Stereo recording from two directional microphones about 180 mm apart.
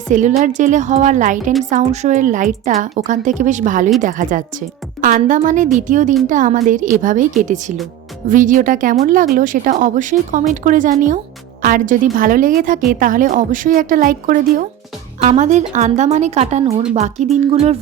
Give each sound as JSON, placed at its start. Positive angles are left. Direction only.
{"t": 0.1, "sound": "a woman's voice", "side_deg": -45}